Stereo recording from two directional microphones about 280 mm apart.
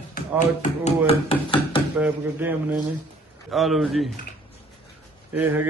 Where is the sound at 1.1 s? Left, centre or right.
Centre.